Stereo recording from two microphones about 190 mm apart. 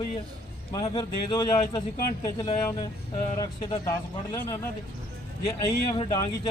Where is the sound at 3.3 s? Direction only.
20° left (ahead or behind).